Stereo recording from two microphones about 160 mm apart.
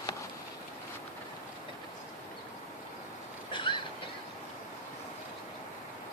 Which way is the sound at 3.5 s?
30° left (ahead or behind).